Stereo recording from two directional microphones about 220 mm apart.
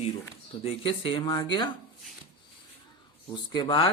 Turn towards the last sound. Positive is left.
turn(degrees=20)  # may be behind; listen again after turning